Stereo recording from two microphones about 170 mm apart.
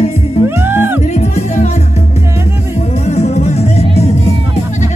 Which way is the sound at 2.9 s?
40° left (ahead or behind).